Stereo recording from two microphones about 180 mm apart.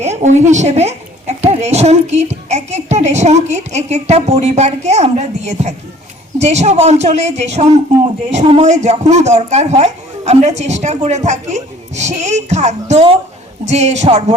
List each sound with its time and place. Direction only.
0.0 s a woman's voice: 40° right (ahead or behind)